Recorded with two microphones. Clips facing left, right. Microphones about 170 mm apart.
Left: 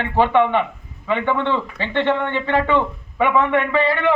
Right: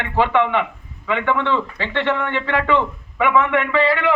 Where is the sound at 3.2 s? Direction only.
30° left (ahead or behind).